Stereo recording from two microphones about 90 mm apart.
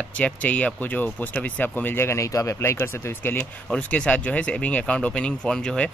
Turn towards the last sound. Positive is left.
turn(degrees=10)  # may be behind; listen again after turning